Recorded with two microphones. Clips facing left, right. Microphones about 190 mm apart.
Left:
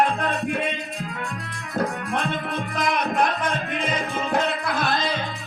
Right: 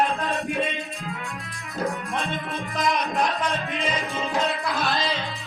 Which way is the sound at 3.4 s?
55° left (ahead or behind).